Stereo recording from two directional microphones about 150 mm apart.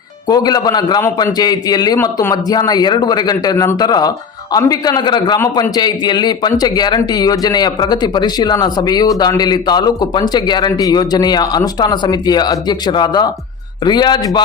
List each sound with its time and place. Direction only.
0.3 s speech: 25° left (ahead or behind)